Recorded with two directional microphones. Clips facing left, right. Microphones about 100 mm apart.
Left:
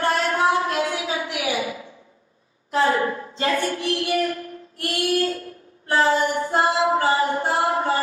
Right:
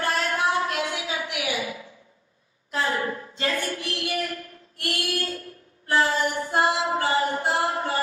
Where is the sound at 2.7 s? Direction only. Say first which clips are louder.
Left 6 dB; 30° left (ahead or behind).